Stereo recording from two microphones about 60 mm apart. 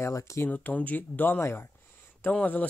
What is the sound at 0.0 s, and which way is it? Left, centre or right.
Speech, left.